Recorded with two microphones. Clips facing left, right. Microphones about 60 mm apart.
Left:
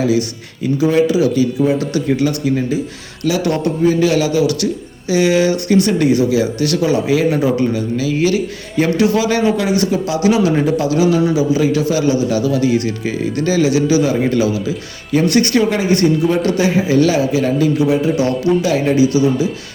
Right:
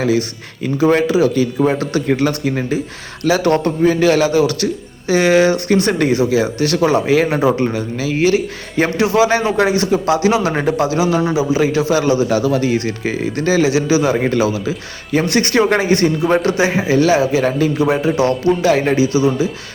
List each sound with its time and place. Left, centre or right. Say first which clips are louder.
0.0 s a man's voice: left 1 dB; right